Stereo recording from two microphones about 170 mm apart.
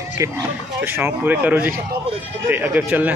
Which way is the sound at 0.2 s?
15° right (ahead or behind).